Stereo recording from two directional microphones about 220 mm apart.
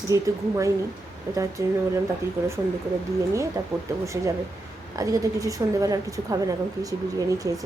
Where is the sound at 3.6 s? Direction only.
15° right (ahead or behind).